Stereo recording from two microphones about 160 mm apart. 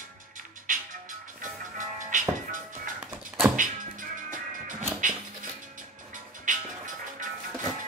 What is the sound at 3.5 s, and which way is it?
Music, 55° right (ahead or behind).